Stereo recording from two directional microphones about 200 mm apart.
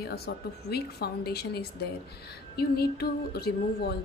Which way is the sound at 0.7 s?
50° left (ahead or behind).